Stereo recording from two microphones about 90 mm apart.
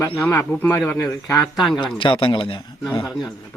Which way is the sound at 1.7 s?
60° left (ahead or behind).